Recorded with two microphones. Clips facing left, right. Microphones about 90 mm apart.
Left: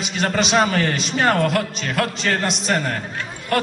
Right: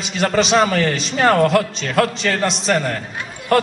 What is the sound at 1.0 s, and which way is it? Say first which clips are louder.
A man's voice: right 6 dB; 35° right (ahead or behind).